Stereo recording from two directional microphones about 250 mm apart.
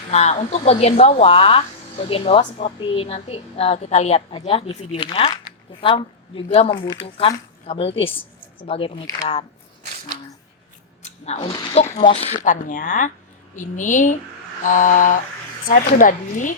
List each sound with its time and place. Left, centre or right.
0.1 s speech: left
11.0 s speech: left